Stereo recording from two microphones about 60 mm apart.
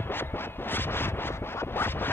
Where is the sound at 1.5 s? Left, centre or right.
Left.